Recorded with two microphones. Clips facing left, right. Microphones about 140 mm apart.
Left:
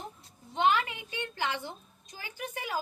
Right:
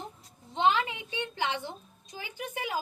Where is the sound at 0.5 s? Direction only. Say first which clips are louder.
Right 1 dB; 20° right (ahead or behind).